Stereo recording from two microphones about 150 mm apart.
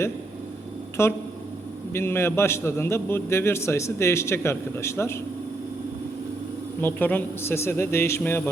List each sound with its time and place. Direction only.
1.0 s a man's voice: 20° left (ahead or behind)
6.8 s a man's voice: 10° left (ahead or behind)